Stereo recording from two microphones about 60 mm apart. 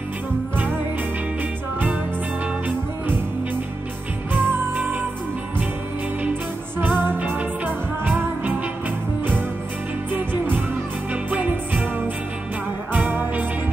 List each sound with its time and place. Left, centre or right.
4.3 s music: right
6.8 s music: right
11.2 s music: right
12.9 s music: right